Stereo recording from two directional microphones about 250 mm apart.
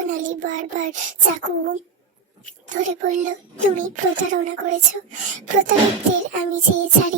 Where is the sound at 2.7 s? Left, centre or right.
Right.